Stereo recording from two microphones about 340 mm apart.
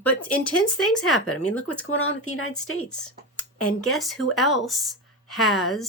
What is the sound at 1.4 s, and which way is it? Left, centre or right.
Speech, centre.